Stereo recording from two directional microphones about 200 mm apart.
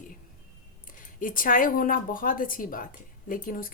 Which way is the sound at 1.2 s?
45° left (ahead or behind).